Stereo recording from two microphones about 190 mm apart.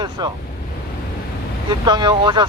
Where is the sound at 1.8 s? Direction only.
25° right (ahead or behind).